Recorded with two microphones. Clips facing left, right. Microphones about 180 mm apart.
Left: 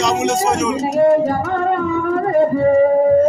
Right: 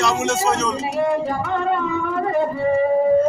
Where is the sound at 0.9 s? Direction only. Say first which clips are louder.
Left 8 dB; 45° left (ahead or behind).